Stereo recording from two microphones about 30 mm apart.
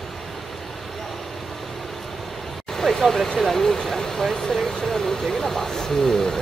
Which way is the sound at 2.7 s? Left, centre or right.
Centre.